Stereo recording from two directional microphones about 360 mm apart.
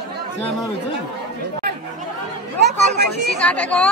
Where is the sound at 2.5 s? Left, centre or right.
Right.